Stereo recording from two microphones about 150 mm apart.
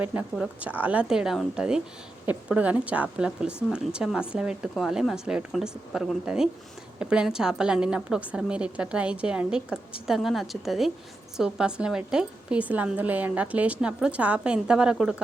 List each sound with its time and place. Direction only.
0.0 s a woman's voice: 10° right (ahead or behind)